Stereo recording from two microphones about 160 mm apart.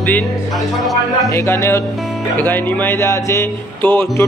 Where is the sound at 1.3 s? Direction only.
15° left (ahead or behind).